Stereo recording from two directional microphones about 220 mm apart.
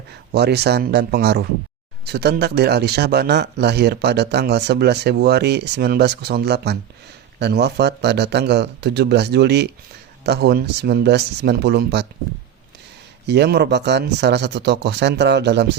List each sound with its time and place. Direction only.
0.3 s speech: 50° right (ahead or behind)
13.2 s speech: 50° right (ahead or behind)